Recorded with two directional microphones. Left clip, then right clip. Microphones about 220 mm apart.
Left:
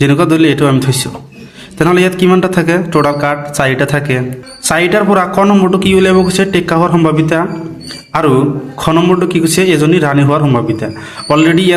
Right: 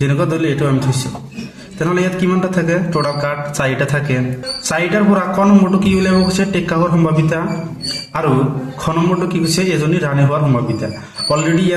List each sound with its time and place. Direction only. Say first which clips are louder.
0.0 s a man's voice: left 8 dB; 40° left (ahead or behind)
8.8 s a man's voice: left 7 dB; 40° left (ahead or behind)